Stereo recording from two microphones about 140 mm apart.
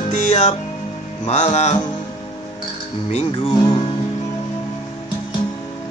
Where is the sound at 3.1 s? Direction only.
50° left (ahead or behind).